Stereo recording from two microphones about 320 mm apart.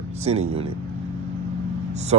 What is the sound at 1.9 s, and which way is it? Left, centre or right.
Speech, right.